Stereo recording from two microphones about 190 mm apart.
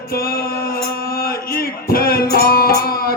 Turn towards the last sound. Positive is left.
turn(degrees=50)  # may be behind; listen again after turning